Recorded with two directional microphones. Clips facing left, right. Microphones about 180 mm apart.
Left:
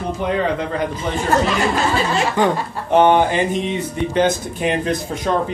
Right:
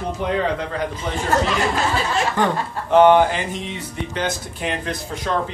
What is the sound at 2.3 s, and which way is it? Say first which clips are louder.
Speech: left 3 dB; 15° left (ahead or behind).